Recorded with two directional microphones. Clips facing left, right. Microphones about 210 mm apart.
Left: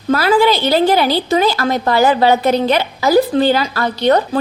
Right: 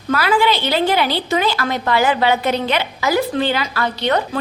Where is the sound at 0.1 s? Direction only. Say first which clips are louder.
Left 4 dB; 35° left (ahead or behind).